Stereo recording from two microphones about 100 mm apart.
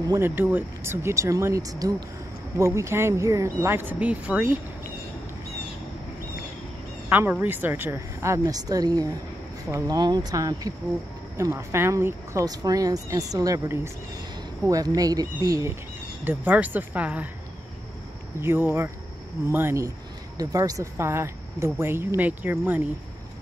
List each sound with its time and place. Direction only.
0.2 s speech: 20° right (ahead or behind)
7.1 s speech: 20° right (ahead or behind)
9.9 s speech: 45° right (ahead or behind)
14.7 s speech: 35° right (ahead or behind)
16.3 s speech: 15° right (ahead or behind)
18.4 s speech: 25° right (ahead or behind)